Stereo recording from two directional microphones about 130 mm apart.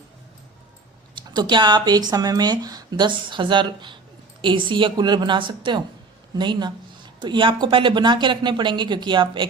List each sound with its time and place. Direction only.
1.1 s speech: 35° right (ahead or behind)